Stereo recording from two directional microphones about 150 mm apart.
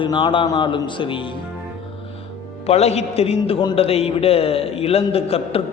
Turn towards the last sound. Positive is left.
turn(degrees=40)  # may be behind; listen again after turning